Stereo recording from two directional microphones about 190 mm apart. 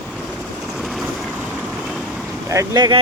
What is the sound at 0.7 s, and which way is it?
Vehicle, centre (ahead or behind).